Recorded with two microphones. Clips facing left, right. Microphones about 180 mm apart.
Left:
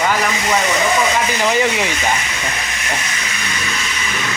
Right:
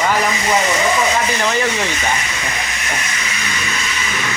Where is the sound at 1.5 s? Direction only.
15° left (ahead or behind).